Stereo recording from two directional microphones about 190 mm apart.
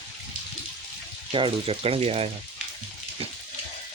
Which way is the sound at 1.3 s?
30° right (ahead or behind).